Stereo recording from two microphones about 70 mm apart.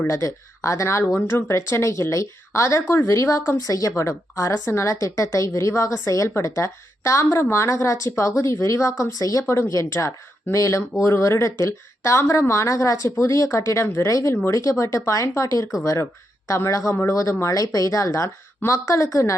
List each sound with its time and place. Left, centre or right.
0.1 s speech: left
9.1 s speech: left
13.1 s speech: left